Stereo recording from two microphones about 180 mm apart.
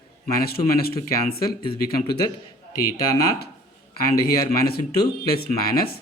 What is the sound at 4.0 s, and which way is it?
A man's voice, 55° left (ahead or behind).